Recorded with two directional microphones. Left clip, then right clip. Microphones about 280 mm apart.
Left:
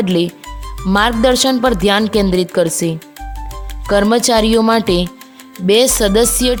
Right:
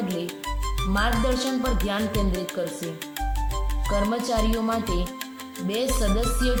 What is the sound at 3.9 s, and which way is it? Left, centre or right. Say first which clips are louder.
Speech: left 13 dB; left.